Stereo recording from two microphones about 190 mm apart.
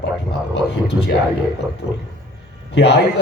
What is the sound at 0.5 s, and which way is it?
Speech, 60° left (ahead or behind).